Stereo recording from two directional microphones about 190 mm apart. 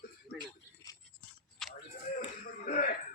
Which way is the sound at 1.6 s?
5° left (ahead or behind).